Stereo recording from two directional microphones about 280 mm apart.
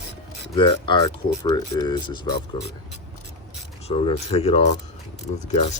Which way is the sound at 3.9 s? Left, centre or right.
Left.